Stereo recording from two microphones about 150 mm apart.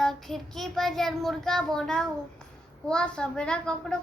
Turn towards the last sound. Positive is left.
turn(degrees=5)  # may be behind; listen again after turning